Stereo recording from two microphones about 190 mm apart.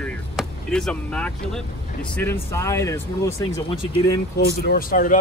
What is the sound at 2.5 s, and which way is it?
Speech, 15° left (ahead or behind).